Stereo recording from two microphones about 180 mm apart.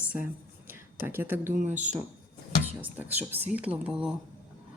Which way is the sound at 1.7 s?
40° right (ahead or behind).